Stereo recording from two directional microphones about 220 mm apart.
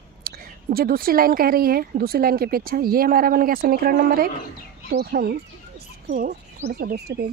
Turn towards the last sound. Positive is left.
turn(degrees=-45)  # may be behind; listen again after turning